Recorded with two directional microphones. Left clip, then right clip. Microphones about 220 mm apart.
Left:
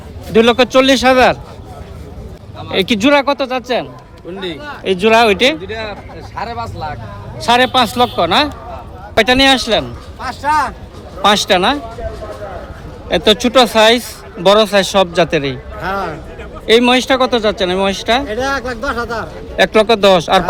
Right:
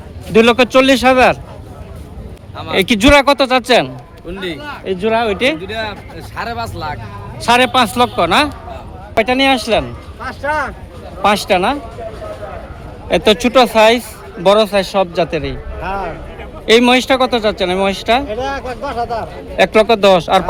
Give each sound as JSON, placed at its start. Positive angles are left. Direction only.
{"t": 0.3, "sound": "speech", "side_deg": -5}
{"t": 2.7, "sound": "a man's voice", "side_deg": -5}
{"t": 4.8, "sound": "a man's voice", "side_deg": 20}
{"t": 5.6, "sound": "speech", "side_deg": -50}
{"t": 7.3, "sound": "speech", "side_deg": -5}
{"t": 9.1, "sound": "speech", "side_deg": 10}
{"t": 10.2, "sound": "speech", "side_deg": 40}
{"t": 11.2, "sound": "speech", "side_deg": 5}
{"t": 13.1, "sound": "a man's voice", "side_deg": 0}
{"t": 15.8, "sound": "music", "side_deg": 50}
{"t": 16.6, "sound": "speech", "side_deg": 0}
{"t": 18.3, "sound": "speech", "side_deg": 50}
{"t": 19.5, "sound": "speech", "side_deg": 0}